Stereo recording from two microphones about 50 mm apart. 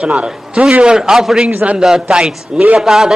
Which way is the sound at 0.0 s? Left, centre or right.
Right.